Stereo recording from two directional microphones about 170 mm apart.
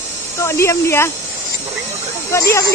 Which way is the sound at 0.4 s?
15° left (ahead or behind).